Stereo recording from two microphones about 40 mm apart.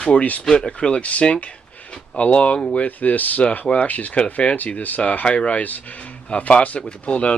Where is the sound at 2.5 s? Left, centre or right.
Left.